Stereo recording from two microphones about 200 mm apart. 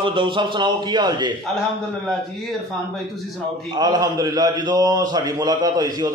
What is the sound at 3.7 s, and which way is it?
A man's voice, 20° right (ahead or behind).